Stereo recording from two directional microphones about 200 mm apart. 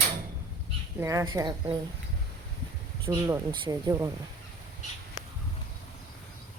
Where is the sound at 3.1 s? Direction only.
15° right (ahead or behind).